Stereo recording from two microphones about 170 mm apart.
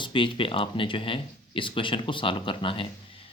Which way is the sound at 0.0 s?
30° left (ahead or behind).